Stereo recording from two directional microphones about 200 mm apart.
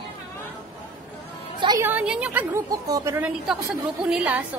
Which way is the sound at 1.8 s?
5° right (ahead or behind).